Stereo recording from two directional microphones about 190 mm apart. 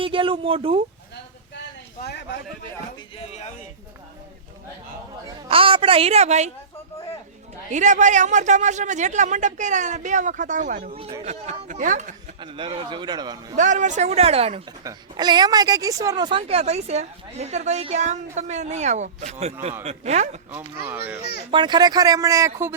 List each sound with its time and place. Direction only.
0.0 s a man's voice: 25° right (ahead or behind)
2.0 s speech: 60° left (ahead or behind)
3.2 s speech: 35° left (ahead or behind)
5.5 s a man's voice: 30° right (ahead or behind)
7.7 s speech: 40° right (ahead or behind)
12.4 s a man's voice: 25° right (ahead or behind)
13.6 s speech: 40° right (ahead or behind)
21.5 s a man's voice: 25° right (ahead or behind)